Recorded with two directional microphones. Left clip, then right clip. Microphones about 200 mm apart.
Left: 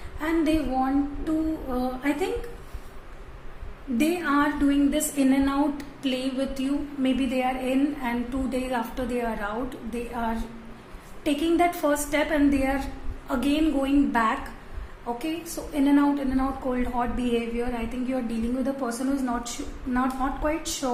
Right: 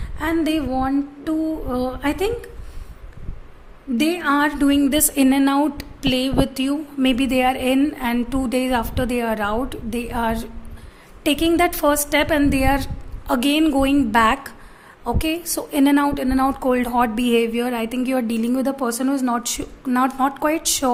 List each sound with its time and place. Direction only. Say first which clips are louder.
0.2 s a woman's voice: right 4 dB; 55° right (ahead or behind)
3.9 s a woman's voice: right 5 dB; 55° right (ahead or behind)